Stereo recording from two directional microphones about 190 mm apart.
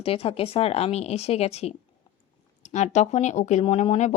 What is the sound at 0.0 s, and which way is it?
Speech, 30° left (ahead or behind).